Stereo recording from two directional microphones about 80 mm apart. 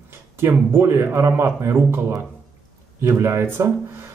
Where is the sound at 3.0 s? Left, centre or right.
Right.